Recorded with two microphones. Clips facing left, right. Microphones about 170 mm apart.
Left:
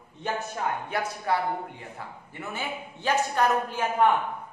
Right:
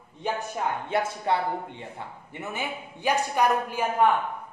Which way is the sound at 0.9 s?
25° right (ahead or behind).